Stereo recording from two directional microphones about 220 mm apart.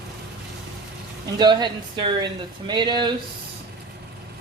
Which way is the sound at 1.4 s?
20° right (ahead or behind).